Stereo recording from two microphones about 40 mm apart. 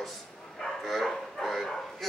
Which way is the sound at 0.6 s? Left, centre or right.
Centre.